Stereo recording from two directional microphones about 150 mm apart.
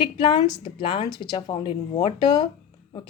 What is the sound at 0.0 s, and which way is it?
A woman's voice, 30° left (ahead or behind).